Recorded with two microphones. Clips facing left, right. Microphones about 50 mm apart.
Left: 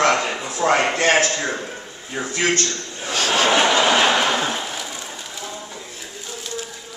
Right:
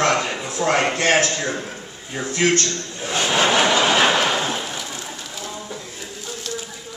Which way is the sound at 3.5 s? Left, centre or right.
Centre.